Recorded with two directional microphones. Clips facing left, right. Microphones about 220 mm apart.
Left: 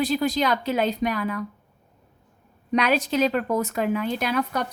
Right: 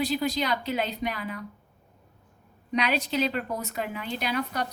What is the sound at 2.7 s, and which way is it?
A woman's voice, 45° left (ahead or behind).